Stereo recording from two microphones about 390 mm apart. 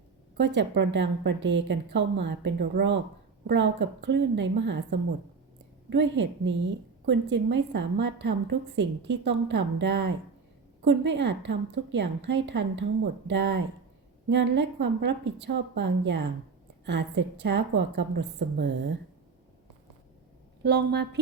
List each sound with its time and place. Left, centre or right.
0.3 s a woman's voice: right
20.7 s a woman's voice: right